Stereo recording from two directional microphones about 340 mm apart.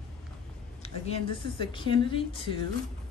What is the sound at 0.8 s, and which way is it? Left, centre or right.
A woman's voice, centre.